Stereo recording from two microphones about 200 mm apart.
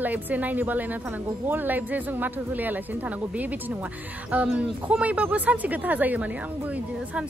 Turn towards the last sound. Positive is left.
turn(degrees=-5)  # may be behind; listen again after turning